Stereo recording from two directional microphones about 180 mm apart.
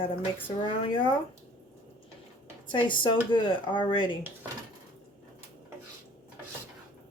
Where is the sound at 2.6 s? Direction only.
25° left (ahead or behind).